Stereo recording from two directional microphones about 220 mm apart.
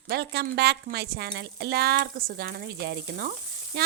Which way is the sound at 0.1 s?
45° right (ahead or behind).